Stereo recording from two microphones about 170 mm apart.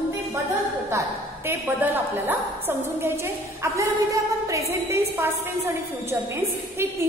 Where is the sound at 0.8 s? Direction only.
15° right (ahead or behind).